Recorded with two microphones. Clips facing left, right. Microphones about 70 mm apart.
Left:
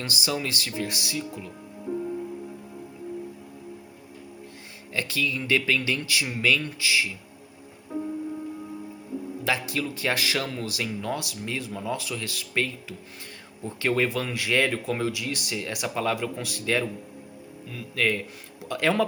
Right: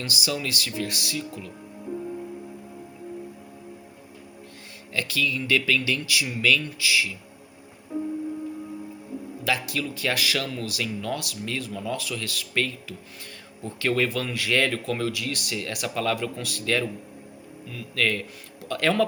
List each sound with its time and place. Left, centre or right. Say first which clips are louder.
0.0 s speech: even; left
4.9 s speech: right 1 dB; left
9.4 s speech: right 1 dB; left